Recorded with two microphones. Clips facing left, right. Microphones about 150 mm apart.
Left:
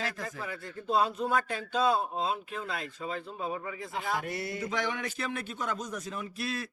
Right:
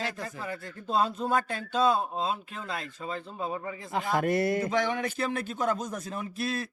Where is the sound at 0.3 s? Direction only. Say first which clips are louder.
Right 2 dB; 35° right (ahead or behind).